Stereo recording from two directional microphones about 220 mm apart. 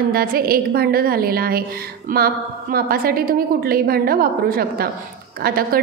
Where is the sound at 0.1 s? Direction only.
40° right (ahead or behind).